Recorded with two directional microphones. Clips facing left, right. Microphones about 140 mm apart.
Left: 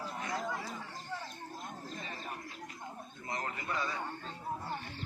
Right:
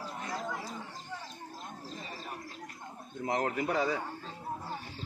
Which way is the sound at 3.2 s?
85° right.